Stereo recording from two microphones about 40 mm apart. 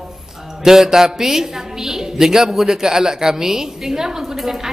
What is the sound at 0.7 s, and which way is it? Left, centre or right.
A woman's voice, centre.